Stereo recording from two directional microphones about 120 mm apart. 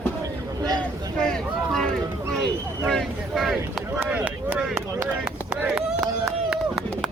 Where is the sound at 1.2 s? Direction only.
5° left (ahead or behind).